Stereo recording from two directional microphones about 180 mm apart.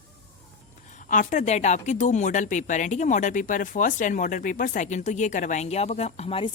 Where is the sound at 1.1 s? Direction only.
45° left (ahead or behind).